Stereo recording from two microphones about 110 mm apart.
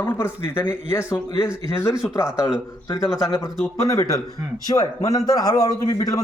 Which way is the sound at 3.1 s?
30° left (ahead or behind).